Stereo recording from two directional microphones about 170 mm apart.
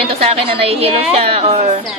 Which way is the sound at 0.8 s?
35° right (ahead or behind).